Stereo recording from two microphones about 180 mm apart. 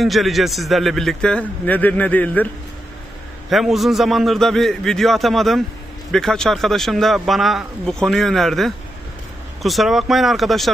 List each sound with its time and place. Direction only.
0.0 s speech: centre (ahead or behind)